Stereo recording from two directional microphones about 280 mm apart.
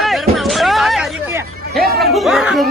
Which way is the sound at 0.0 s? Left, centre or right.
Centre.